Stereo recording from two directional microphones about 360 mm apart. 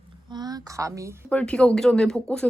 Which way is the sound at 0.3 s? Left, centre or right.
Centre.